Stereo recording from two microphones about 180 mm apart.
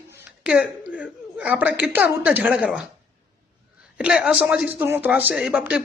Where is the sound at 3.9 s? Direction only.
5° right (ahead or behind).